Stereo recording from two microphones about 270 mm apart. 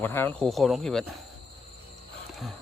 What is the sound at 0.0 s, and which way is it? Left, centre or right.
Speech, centre.